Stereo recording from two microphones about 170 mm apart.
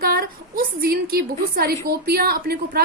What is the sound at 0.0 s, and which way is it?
A woman's voice, 60° right (ahead or behind).